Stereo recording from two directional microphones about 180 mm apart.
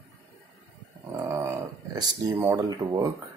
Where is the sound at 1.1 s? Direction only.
15° right (ahead or behind).